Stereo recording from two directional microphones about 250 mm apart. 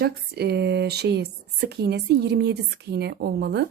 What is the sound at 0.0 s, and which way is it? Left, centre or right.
A woman's voice, right.